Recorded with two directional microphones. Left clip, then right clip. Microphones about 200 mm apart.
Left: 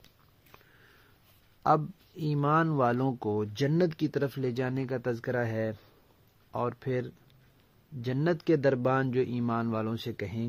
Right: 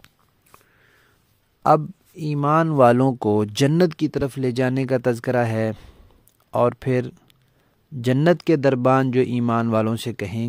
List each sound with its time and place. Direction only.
1.6 s speech: 35° right (ahead or behind)